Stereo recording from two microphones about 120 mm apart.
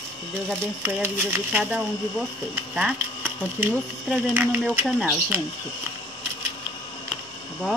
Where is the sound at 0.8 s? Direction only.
20° right (ahead or behind).